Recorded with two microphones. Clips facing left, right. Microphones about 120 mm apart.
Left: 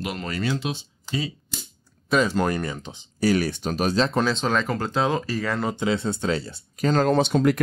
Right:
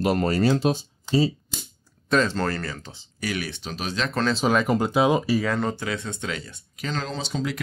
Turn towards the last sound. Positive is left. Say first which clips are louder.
# left 9 dB
turn(degrees=55)  # may be behind; listen again after turning